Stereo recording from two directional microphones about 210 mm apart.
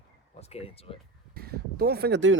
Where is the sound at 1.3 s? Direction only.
45° right (ahead or behind).